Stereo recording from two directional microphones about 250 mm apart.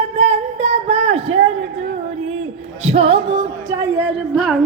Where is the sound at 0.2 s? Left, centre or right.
Right.